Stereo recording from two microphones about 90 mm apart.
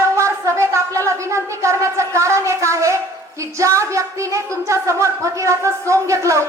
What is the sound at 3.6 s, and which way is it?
A woman's voice, 35° right (ahead or behind).